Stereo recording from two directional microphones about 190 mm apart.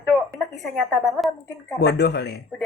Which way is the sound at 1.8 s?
60° left (ahead or behind).